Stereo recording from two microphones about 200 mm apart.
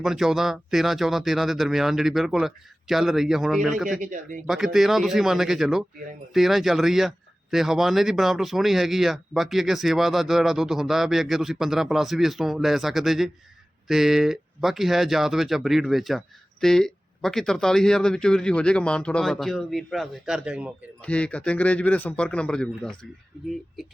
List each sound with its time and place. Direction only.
0.0 s speech: centre (ahead or behind)
4.0 s speech: 40° right (ahead or behind)
4.4 s speech: centre (ahead or behind)
21.0 s speech: 5° left (ahead or behind)